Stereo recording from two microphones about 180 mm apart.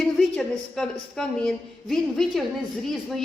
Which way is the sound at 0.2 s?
5° left (ahead or behind).